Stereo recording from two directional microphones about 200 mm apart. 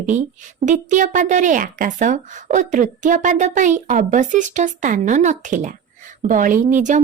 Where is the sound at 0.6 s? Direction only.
40° right (ahead or behind).